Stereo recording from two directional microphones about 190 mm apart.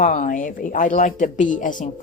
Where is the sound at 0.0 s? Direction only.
40° left (ahead or behind).